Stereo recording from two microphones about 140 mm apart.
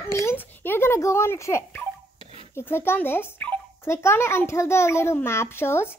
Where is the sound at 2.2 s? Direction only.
45° right (ahead or behind).